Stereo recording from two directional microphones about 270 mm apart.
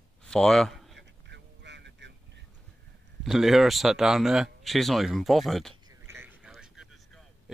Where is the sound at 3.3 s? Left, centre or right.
Centre.